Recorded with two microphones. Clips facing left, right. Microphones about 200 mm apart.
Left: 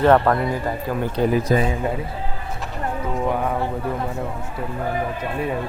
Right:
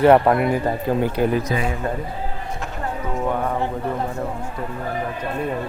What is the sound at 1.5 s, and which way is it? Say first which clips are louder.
Speech: left 4 dB; 35° left (ahead or behind).